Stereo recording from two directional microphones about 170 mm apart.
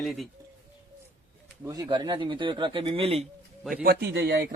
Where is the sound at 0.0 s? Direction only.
Centre (ahead or behind).